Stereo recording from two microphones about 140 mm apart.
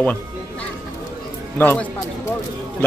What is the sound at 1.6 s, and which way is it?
Speech, 15° left (ahead or behind).